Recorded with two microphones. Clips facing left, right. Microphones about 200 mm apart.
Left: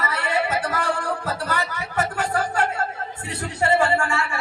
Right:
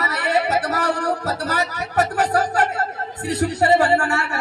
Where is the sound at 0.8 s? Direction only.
40° right (ahead or behind).